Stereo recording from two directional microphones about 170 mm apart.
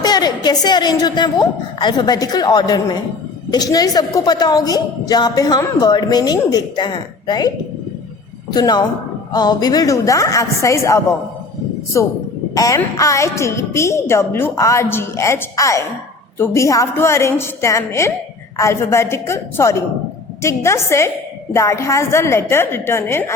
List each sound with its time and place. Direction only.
0.0 s a woman's voice: 25° left (ahead or behind)
12.5 s a woman's voice: 20° left (ahead or behind)